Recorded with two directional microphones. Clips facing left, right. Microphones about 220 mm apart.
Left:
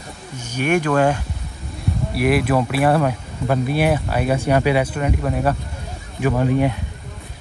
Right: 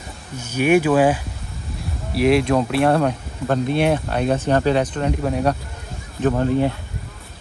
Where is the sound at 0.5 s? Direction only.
10° right (ahead or behind).